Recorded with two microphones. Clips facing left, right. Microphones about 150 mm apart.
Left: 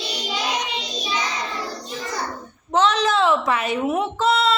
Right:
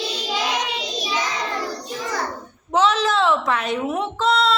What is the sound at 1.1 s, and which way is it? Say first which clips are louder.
Child singing: right 1 dB; 90° right.